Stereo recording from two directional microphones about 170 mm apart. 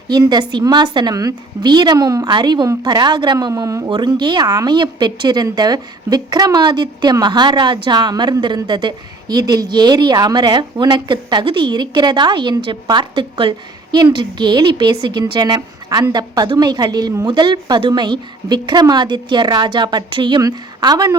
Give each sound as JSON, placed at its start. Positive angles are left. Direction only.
{"t": 0.1, "sound": "a woman's voice", "side_deg": -25}